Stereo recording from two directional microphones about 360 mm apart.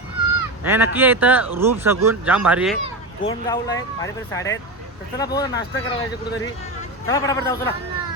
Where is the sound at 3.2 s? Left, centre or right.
Centre.